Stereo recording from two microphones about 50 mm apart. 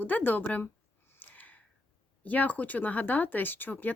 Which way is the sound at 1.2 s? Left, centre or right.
Left.